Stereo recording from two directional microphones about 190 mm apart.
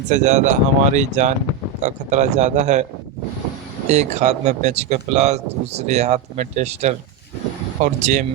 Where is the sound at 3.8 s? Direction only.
35° right (ahead or behind).